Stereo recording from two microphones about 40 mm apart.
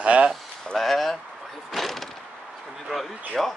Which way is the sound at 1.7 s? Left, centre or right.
Centre.